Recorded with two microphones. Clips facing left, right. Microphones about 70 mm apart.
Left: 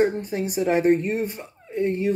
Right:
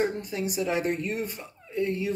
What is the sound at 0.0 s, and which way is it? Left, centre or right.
Speech, left.